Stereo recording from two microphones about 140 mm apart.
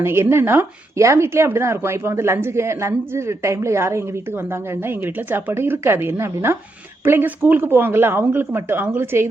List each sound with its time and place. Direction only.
0.0 s speech: 20° right (ahead or behind)